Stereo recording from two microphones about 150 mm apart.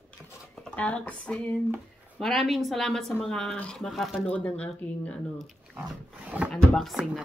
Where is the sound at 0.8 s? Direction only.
10° left (ahead or behind).